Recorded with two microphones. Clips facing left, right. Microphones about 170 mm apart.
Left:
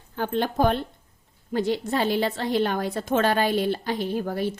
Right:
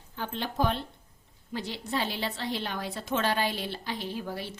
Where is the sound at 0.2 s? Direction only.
50° left (ahead or behind).